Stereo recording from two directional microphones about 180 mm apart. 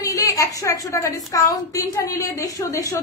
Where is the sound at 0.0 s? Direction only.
20° left (ahead or behind).